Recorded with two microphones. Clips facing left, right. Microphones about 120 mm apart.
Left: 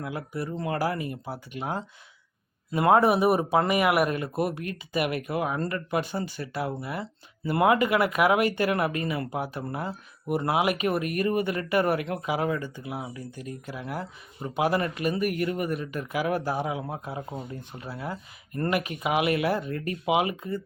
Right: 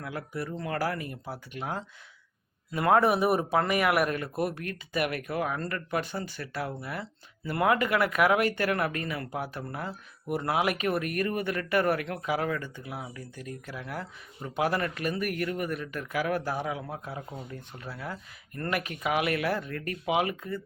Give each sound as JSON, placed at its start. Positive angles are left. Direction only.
{"t": 0.0, "sound": "speech", "side_deg": 15}
{"t": 2.7, "sound": "speech", "side_deg": 15}